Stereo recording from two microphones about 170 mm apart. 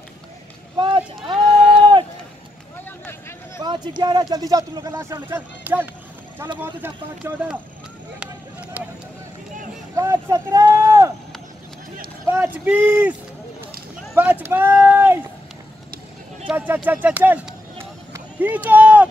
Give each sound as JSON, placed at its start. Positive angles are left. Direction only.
{"t": 0.7, "sound": "a sound", "side_deg": -30}
{"t": 3.1, "sound": "a sound", "side_deg": 15}
{"t": 3.6, "sound": "speech", "side_deg": -25}
{"t": 8.2, "sound": "a sound", "side_deg": -10}
{"t": 9.9, "sound": "speech", "side_deg": -20}
{"t": 12.3, "sound": "speech", "side_deg": -10}
{"t": 14.1, "sound": "speech", "side_deg": -10}
{"t": 16.4, "sound": "speech", "side_deg": -10}
{"t": 18.1, "sound": "run", "side_deg": -10}